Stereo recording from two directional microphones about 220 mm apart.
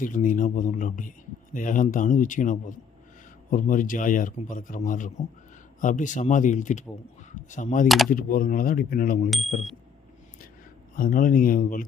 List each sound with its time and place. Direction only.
0.0 s a man's voice: 35° left (ahead or behind)
7.9 s speech: centre (ahead or behind)
8.1 s a man's voice: 40° left (ahead or behind)
10.9 s a man's voice: 40° left (ahead or behind)